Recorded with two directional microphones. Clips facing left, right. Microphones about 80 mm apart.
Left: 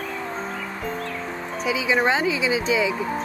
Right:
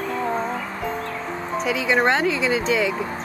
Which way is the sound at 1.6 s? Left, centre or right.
Centre.